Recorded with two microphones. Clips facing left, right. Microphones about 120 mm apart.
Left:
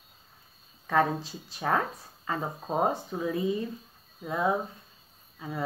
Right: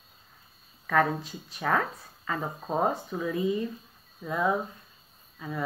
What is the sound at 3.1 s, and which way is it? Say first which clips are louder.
A woman's voice: right 1 dB; 25° left (ahead or behind).